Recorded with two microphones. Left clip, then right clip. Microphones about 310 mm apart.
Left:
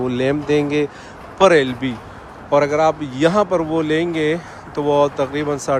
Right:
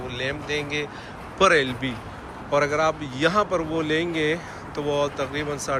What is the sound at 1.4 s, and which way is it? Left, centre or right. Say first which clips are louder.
A man's voice: left 6 dB; centre.